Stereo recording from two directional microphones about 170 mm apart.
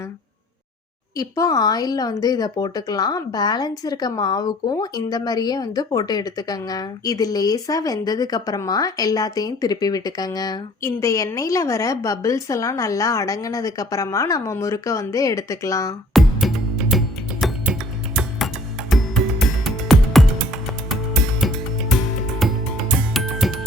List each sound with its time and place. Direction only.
1.1 s speech: 20° left (ahead or behind)
16.1 s music: centre (ahead or behind)
21.4 s music: centre (ahead or behind)